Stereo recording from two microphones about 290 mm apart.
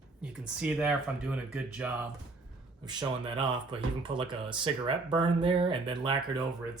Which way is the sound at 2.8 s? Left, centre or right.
Centre.